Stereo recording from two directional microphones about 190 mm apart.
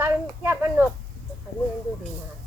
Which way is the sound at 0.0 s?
10° right (ahead or behind).